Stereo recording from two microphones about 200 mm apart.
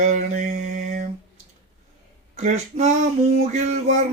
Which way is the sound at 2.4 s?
35° right (ahead or behind).